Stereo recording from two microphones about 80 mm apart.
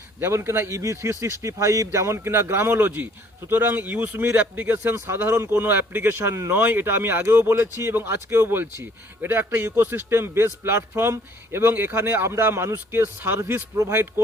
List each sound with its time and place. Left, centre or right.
0.2 s a man's voice: right